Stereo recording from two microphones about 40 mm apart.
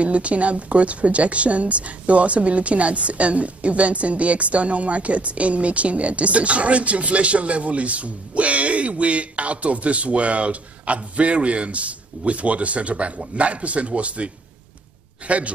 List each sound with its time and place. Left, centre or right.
0.0 s speech: right